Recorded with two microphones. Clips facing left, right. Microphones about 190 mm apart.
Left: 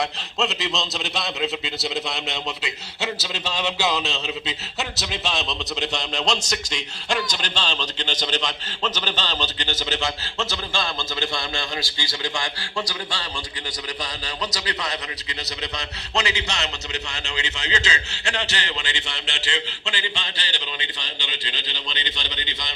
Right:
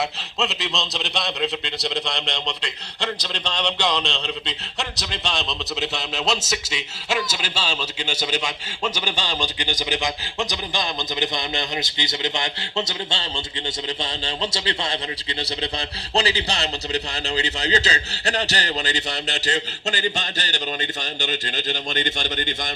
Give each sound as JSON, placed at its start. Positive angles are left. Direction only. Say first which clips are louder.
{"t": 0.0, "sound": "a man's voice", "louder": "even", "side_deg": 0}